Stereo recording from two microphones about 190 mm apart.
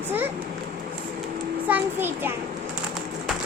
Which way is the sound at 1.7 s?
10° right (ahead or behind).